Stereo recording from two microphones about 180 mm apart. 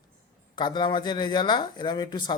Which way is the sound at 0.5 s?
25° left (ahead or behind).